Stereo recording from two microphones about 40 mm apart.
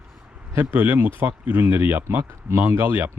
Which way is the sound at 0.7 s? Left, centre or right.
Right.